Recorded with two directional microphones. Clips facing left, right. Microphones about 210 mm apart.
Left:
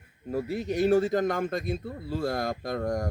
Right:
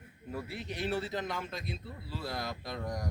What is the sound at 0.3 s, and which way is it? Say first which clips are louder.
Speech: left 10 dB; 40° left (ahead or behind).